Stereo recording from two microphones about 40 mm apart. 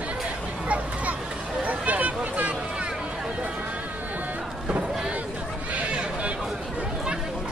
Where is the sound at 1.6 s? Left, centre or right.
Right.